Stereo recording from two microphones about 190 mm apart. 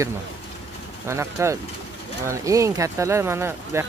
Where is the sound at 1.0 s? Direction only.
15° right (ahead or behind).